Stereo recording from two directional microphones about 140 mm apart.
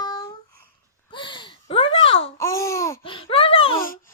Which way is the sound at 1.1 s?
35° left (ahead or behind).